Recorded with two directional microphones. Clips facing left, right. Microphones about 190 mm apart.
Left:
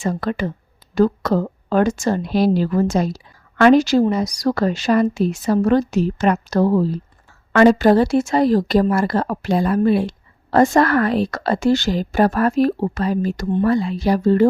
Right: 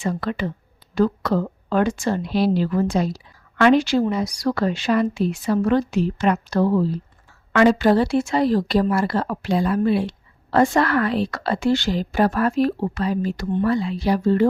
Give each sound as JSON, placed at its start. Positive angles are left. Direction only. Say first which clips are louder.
{"t": 0.0, "sound": "a woman's voice", "louder": "left 3 dB", "side_deg": 45}